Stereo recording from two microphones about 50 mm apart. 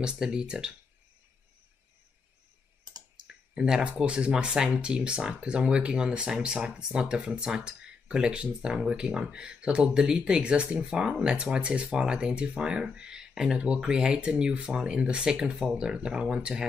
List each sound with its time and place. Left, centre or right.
0.0 s speech: centre
3.5 s speech: centre